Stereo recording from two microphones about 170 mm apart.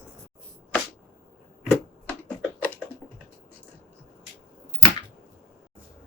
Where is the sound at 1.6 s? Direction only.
10° left (ahead or behind).